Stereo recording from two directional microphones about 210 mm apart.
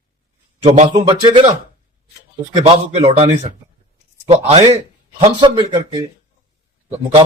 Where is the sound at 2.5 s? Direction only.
25° right (ahead or behind).